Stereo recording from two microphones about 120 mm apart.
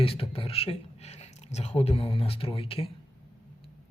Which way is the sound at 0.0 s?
50° left (ahead or behind).